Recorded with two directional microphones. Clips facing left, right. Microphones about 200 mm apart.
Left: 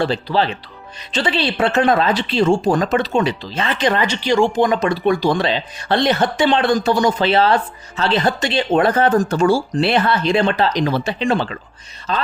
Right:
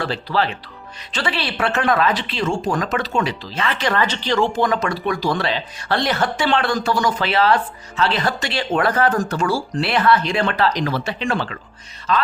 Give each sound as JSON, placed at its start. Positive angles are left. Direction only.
{"t": 0.0, "sound": "speech", "side_deg": 25}